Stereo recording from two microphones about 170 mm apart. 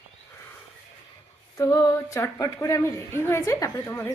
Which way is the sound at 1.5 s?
20° left (ahead or behind).